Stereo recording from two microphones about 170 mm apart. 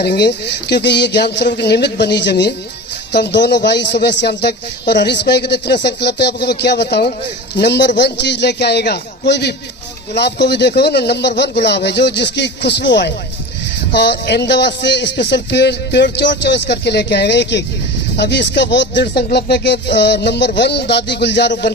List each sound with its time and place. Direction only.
0.0 s a man's voice: 75° left (ahead or behind)